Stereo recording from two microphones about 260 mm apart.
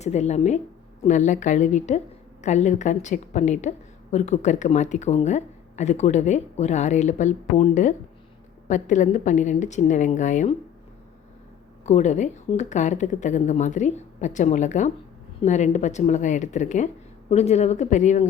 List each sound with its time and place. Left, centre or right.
0.0 s a woman's voice: left
11.9 s a woman's voice: left